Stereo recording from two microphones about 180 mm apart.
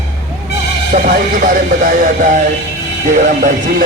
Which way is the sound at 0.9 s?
40° right (ahead or behind).